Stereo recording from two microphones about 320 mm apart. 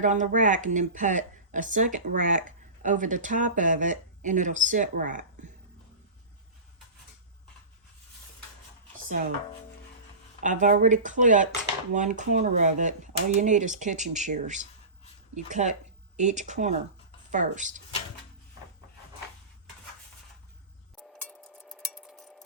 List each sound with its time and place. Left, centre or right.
0.0 s speech: right
10.4 s speech: right
20.9 s a sound: centre